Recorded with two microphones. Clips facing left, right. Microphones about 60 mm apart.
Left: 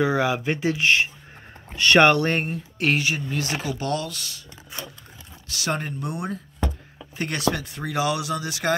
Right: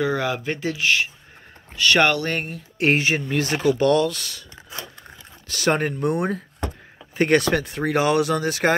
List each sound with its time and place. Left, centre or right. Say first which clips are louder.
0.0 s speech: left 1 dB; centre
2.8 s speech: right 4 dB; right
5.5 s speech: right 6 dB; right